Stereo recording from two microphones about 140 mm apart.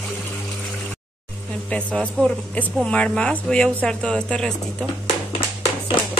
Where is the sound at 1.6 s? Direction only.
10° left (ahead or behind).